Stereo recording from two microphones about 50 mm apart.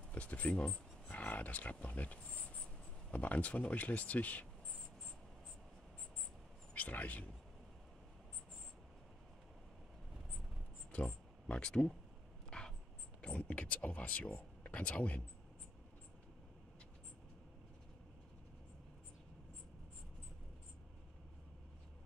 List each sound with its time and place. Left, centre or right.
0.1 s speech: left
6.7 s speech: left
10.9 s speech: left
12.4 s a sound: centre
13.2 s speech: left